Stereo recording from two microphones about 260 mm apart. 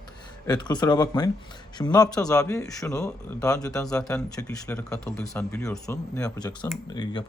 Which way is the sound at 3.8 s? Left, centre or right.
Centre.